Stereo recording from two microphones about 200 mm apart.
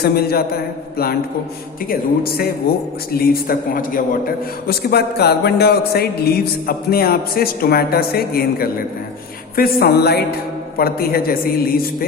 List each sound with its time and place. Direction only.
0.0 s music: 50° left (ahead or behind)